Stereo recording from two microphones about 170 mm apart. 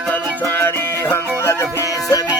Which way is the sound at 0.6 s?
15° left (ahead or behind).